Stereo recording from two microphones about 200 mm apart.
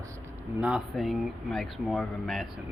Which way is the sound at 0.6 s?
5° right (ahead or behind).